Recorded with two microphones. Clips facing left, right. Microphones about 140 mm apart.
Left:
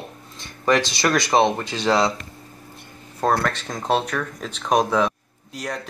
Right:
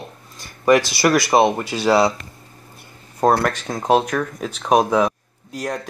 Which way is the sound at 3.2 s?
10° right (ahead or behind).